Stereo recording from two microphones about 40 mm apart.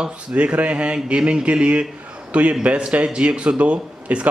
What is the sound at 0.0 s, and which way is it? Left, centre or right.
Speech, right.